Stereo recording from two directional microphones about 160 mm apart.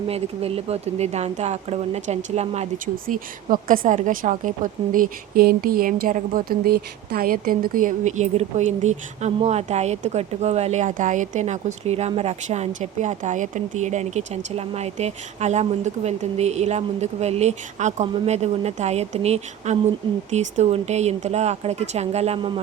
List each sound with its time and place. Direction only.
0.1 s speech: 40° right (ahead or behind)